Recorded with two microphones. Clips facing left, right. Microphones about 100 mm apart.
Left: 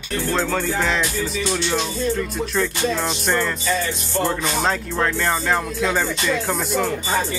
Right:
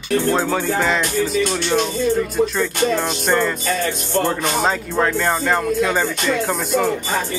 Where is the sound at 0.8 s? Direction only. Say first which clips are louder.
Right 3 dB; centre (ahead or behind).